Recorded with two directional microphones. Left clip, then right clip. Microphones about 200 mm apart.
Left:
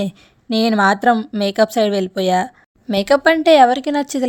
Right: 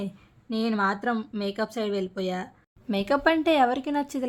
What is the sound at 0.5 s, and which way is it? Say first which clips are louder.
A woman's voice: left 11 dB; 45° left (ahead or behind).